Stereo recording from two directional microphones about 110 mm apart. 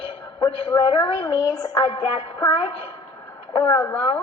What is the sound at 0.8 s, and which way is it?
Music, 55° left (ahead or behind).